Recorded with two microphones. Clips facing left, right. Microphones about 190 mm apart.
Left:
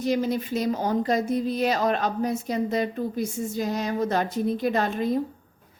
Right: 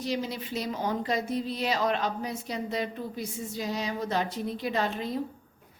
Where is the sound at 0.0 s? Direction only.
50° left (ahead or behind).